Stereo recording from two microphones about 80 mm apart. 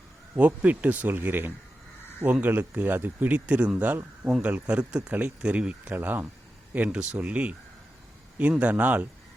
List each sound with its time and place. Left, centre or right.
0.3 s speech: centre